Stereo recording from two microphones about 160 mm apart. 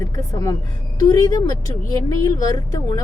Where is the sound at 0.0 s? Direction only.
25° left (ahead or behind).